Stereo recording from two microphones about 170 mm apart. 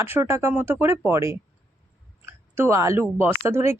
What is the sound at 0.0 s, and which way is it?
A woman's voice, 15° right (ahead or behind).